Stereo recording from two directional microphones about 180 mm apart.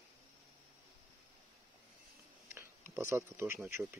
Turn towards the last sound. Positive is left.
turn(degrees=-15)  # may be behind; listen again after turning